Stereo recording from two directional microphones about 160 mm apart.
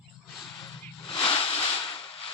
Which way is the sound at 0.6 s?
35° left (ahead or behind).